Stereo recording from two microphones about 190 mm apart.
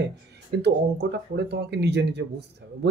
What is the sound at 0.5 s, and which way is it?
Speech, 65° right (ahead or behind).